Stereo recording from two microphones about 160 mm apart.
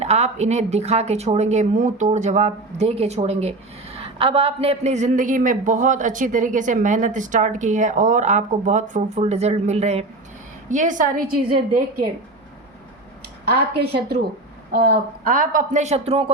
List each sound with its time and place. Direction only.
0.0 s a man's voice: 45° right (ahead or behind); by 12.0 s 65° right (ahead or behind)
13.5 s a woman's voice: 85° right
14.7 s a woman's voice: 75° right (ahead or behind); by 16.3 s 35° right (ahead or behind)